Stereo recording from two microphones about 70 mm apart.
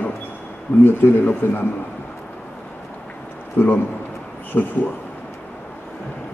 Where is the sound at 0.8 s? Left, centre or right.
Left.